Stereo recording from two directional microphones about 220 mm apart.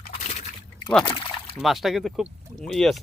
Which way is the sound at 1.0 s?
20° left (ahead or behind).